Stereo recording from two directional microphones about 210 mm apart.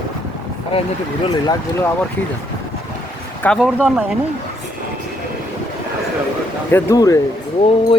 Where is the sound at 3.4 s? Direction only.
5° left (ahead or behind).